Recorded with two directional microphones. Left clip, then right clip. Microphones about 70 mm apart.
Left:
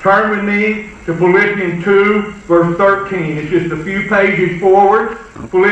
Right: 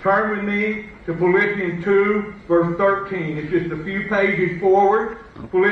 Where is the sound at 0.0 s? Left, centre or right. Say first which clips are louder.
Left 7 dB; centre.